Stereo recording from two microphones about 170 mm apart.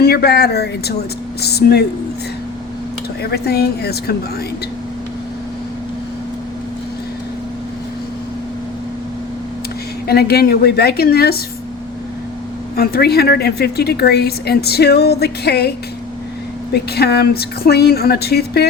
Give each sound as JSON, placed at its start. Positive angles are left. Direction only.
{"t": 0.0, "sound": "a woman's voice", "side_deg": 70}
{"t": 3.3, "sound": "a woman's voice", "side_deg": 70}
{"t": 10.1, "sound": "a woman's voice", "side_deg": 65}
{"t": 12.7, "sound": "a woman's voice", "side_deg": 65}
{"t": 16.7, "sound": "a woman's voice", "side_deg": 70}